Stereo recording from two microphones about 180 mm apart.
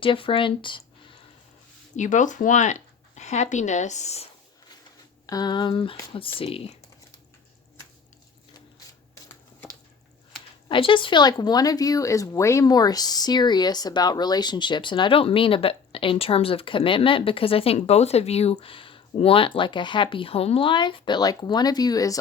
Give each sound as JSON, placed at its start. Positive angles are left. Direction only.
{"t": 0.0, "sound": "speech", "side_deg": 30}
{"t": 2.0, "sound": "speech", "side_deg": 45}
{"t": 5.2, "sound": "speech", "side_deg": 20}
{"t": 10.7, "sound": "speech", "side_deg": 30}